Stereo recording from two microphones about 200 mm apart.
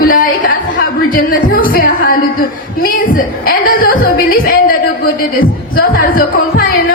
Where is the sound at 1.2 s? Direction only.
45° left (ahead or behind).